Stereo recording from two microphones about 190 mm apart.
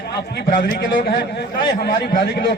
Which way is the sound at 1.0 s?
60° left (ahead or behind).